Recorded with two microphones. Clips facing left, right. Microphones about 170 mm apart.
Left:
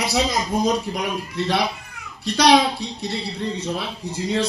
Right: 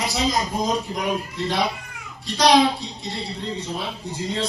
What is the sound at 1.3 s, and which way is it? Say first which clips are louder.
A man's voice: left 2 dB; 70° left (ahead or behind).